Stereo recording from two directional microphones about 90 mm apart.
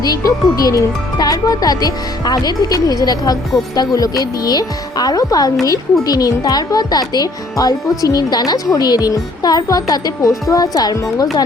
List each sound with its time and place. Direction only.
0.0 s a child's voice: 40° left (ahead or behind)